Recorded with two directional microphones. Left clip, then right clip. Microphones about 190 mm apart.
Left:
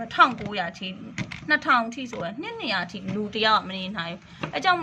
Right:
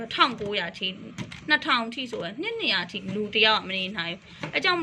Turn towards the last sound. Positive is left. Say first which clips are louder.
# left 2 dB
turn(degrees=20)  # may be behind; listen again after turning